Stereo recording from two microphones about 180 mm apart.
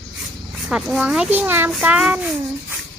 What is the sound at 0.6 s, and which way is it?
A child's voice, 5° right (ahead or behind).